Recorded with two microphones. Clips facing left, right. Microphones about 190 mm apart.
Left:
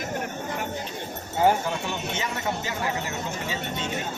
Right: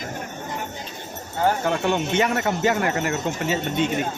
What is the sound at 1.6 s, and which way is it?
Speech, 65° right (ahead or behind).